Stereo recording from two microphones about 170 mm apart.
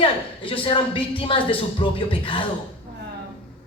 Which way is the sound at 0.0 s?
30° left (ahead or behind).